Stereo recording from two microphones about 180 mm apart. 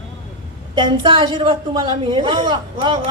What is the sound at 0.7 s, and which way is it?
A woman's voice, 30° right (ahead or behind).